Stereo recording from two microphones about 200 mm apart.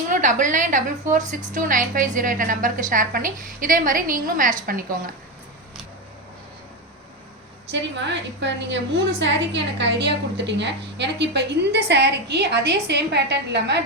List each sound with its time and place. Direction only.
0.1 s a woman's voice: 40° right (ahead or behind)
7.7 s a woman's voice: 65° right (ahead or behind)